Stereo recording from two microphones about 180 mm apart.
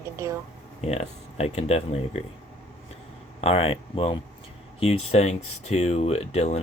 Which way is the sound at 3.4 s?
35° left (ahead or behind).